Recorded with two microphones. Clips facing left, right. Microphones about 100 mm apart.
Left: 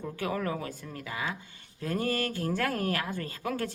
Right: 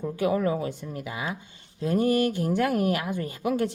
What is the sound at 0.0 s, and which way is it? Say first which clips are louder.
A woman's voice: right 7 dB; 20° right (ahead or behind).